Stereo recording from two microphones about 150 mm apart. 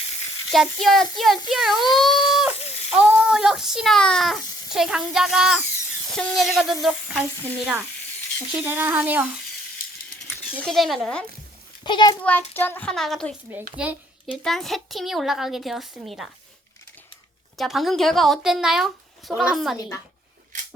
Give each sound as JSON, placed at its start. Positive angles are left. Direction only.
{"t": 0.5, "sound": "a child's voice", "side_deg": 0}
{"t": 10.2, "sound": "coin", "side_deg": -5}
{"t": 10.7, "sound": "a child's voice", "side_deg": 0}
{"t": 11.8, "sound": "a child's voice", "side_deg": 30}
{"t": 12.2, "sound": "child singing", "side_deg": 10}
{"t": 14.4, "sound": "a child's voice", "side_deg": 0}
{"t": 17.6, "sound": "a child's voice", "side_deg": 0}